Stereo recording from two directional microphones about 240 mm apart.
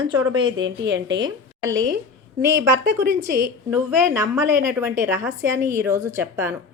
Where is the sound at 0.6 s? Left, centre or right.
Right.